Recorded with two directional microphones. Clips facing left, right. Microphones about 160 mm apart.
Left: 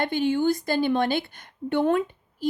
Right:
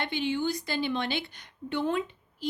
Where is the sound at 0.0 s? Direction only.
50° left (ahead or behind).